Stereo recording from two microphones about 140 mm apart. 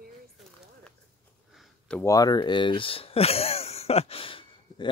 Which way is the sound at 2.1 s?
25° left (ahead or behind).